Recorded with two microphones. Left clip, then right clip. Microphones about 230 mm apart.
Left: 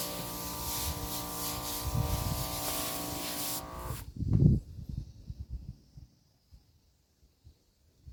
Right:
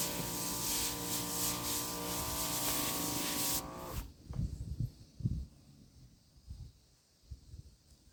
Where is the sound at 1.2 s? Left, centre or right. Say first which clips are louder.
Even; left.